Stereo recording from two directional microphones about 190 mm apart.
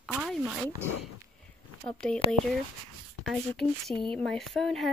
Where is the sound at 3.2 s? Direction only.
Centre (ahead or behind).